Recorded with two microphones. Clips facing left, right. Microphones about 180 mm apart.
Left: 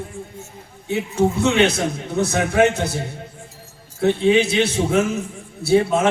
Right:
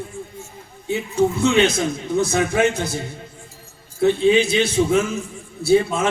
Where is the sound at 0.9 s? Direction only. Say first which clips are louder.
Even; 70° left (ahead or behind).